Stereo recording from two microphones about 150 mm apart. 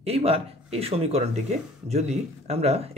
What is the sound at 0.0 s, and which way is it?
Speech, 40° right (ahead or behind).